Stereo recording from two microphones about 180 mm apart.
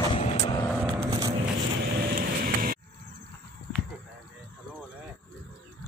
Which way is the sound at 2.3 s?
50° right (ahead or behind).